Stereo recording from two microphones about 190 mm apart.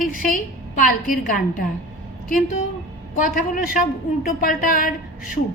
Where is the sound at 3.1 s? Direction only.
45° left (ahead or behind).